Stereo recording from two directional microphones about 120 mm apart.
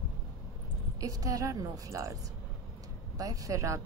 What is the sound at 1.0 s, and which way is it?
A woman's voice, 30° right (ahead or behind).